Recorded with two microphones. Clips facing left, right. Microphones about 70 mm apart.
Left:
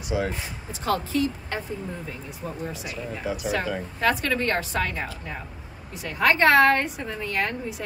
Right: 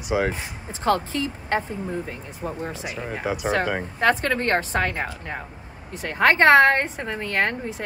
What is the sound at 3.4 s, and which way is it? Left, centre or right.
A woman's voice, right.